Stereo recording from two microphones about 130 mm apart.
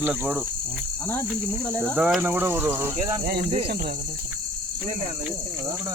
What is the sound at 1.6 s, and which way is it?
Speech, 10° left (ahead or behind).